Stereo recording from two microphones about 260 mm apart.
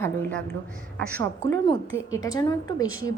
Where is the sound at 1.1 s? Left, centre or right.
Centre.